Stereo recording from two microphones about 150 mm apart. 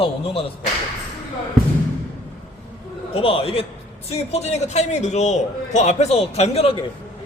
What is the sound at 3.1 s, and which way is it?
A man's voice, 40° left (ahead or behind).